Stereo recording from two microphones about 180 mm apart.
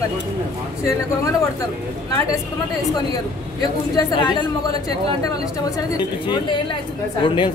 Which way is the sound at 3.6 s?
20° left (ahead or behind).